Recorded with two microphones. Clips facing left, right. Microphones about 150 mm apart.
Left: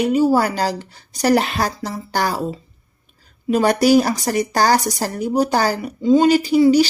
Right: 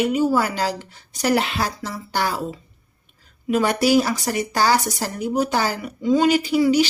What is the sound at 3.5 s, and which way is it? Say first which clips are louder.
A woman's voice: left 4 dB; 40° left (ahead or behind).